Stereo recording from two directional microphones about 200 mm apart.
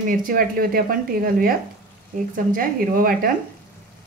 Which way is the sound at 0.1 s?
45° right (ahead or behind).